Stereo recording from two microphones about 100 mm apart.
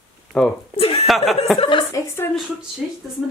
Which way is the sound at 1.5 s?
60° left (ahead or behind).